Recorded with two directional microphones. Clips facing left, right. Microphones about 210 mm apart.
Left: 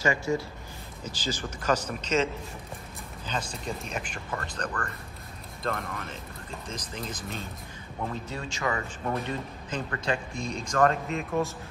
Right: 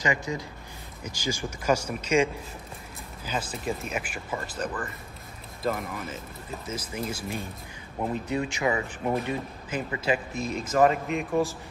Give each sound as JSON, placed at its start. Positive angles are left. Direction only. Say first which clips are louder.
{"t": 0.0, "sound": "speech", "louder": "left 2 dB", "side_deg": -15}
{"t": 3.3, "sound": "speech", "louder": "right 3 dB", "side_deg": -5}